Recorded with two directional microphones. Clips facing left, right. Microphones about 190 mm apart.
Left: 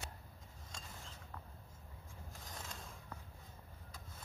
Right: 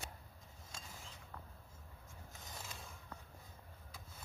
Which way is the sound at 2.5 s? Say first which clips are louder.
Left 1 dB; 5° right (ahead or behind).